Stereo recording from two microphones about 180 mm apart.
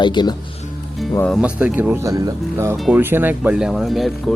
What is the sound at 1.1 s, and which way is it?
Speech, 10° left (ahead or behind).